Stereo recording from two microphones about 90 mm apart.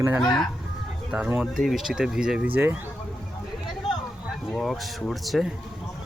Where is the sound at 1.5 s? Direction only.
Centre (ahead or behind).